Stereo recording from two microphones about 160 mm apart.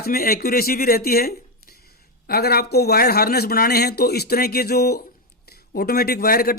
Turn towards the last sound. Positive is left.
turn(degrees=70)  # may be behind; listen again after turning